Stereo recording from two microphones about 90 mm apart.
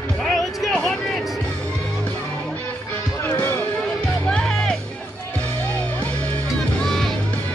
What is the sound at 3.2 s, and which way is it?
Music, 20° left (ahead or behind).